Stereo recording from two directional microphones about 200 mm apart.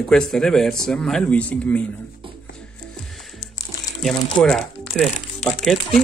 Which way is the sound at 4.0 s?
5° left (ahead or behind).